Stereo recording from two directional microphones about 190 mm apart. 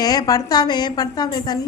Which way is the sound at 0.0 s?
20° left (ahead or behind).